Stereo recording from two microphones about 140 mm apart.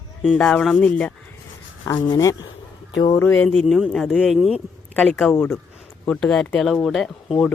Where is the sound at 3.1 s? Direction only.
10° left (ahead or behind).